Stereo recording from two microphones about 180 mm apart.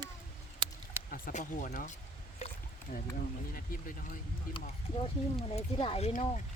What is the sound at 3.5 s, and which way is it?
Speech, 50° left (ahead or behind).